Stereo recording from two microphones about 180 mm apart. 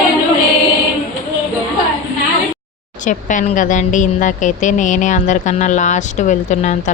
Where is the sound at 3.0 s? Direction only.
45° left (ahead or behind).